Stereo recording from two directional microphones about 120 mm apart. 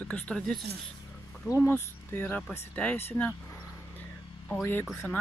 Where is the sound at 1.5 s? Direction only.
20° left (ahead or behind).